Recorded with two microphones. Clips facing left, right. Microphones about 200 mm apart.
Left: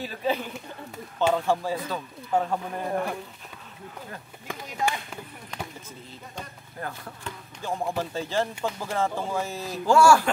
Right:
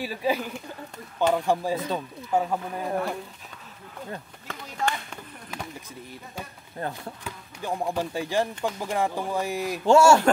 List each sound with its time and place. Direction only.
0.0 s speech: 10° right (ahead or behind)
0.5 s a sound: 5° left (ahead or behind)
1.3 s speech: 15° right (ahead or behind)
2.3 s speech: 5° right (ahead or behind)
4.5 s speech: 15° left (ahead or behind)
6.8 s speech: 25° right (ahead or behind)